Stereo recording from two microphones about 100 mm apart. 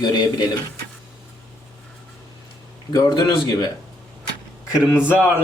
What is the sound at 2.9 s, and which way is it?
Speech, 45° left (ahead or behind).